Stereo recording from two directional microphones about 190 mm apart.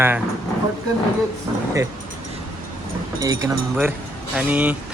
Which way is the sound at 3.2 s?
20° right (ahead or behind).